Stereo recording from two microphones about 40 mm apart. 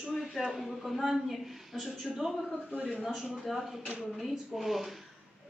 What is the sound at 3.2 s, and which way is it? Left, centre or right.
Speech, centre.